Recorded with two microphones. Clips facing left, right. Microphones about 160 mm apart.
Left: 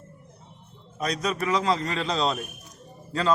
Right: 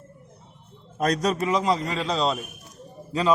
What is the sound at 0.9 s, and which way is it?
Speech, 45° right (ahead or behind).